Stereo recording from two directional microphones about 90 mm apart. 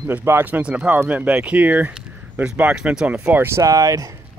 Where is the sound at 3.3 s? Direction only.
30° right (ahead or behind).